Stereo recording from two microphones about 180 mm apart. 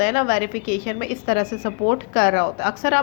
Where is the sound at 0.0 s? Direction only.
45° left (ahead or behind).